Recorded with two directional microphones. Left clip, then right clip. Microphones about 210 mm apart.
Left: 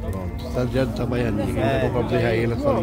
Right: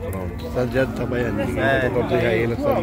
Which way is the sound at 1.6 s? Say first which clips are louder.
Right 3 dB; 30° left (ahead or behind).